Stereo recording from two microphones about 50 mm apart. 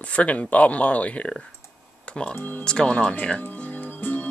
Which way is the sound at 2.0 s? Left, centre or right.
Centre.